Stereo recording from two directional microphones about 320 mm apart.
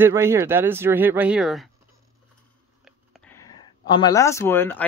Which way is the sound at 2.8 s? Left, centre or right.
Centre.